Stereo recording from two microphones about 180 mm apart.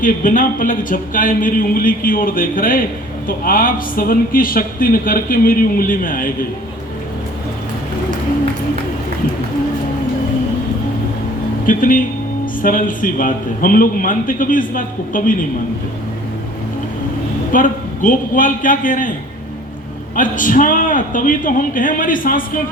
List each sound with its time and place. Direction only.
0.0 s speech: 45° left (ahead or behind)
11.6 s speech: 50° left (ahead or behind)
17.5 s speech: 45° left (ahead or behind)
20.1 s speech: 45° left (ahead or behind)